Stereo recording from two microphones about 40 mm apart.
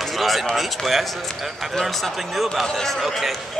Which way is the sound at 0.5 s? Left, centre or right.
Centre.